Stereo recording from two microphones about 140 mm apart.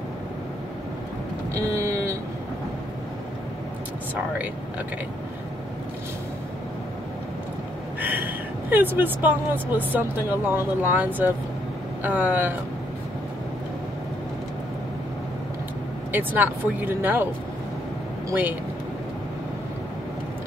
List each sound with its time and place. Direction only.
1.5 s vehicle: 20° right (ahead or behind)
8.0 s speech: 15° right (ahead or behind)
16.1 s speech: 15° right (ahead or behind)
18.3 s speech: 15° right (ahead or behind)